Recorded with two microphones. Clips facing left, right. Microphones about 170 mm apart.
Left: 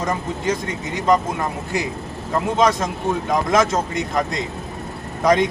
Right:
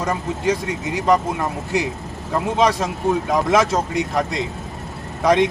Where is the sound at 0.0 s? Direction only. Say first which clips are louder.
Right 1 dB; 10° right (ahead or behind).